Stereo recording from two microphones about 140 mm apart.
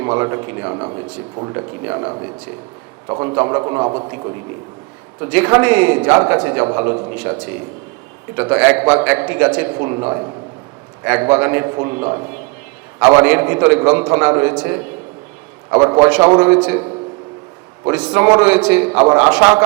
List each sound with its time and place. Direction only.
0.0 s speech: 20° right (ahead or behind)
5.2 s a man's voice: 15° right (ahead or behind)
8.4 s a man's voice: 15° right (ahead or behind)
15.7 s speech: 25° right (ahead or behind)
16.0 s a man's voice: 10° right (ahead or behind)
17.8 s a man's voice: 10° right (ahead or behind)